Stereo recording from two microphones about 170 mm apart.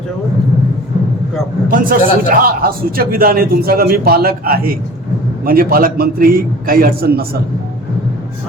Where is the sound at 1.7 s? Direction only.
55° right (ahead or behind).